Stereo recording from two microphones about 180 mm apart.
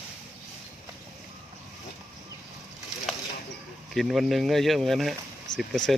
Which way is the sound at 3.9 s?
Centre (ahead or behind).